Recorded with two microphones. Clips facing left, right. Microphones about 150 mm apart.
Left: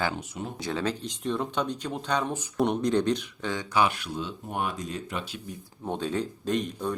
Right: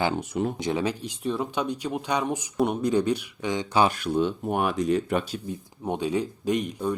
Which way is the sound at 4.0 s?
60° right (ahead or behind).